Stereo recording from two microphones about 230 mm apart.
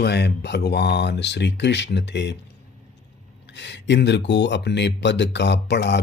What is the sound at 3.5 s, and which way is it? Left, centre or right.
Speech, left.